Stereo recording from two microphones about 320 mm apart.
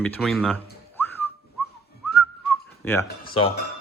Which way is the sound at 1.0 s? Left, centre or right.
Centre.